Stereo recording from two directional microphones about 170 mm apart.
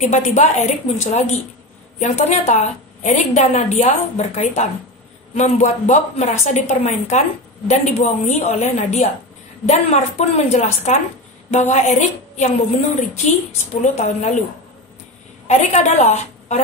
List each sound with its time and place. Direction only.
0.0 s a woman's voice: 45° left (ahead or behind)
15.4 s a woman's voice: 45° left (ahead or behind)